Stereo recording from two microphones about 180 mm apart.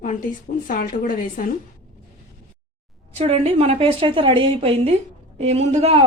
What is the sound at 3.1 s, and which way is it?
A woman's voice, 35° right (ahead or behind).